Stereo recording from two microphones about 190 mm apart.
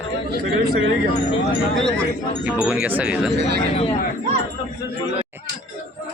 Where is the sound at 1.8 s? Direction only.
Centre (ahead or behind).